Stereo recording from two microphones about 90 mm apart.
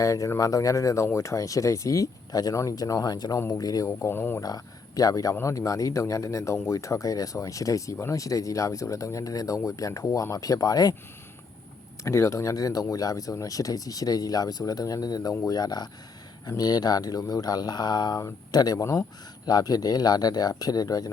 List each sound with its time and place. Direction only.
0.0 s speech: 40° left (ahead or behind)
3.8 s speech: 25° left (ahead or behind)
4.4 s speech: 45° left (ahead or behind)
12.0 s speech: 35° left (ahead or behind); by 18.2 s 50° left (ahead or behind)
18.2 s speech: 35° left (ahead or behind)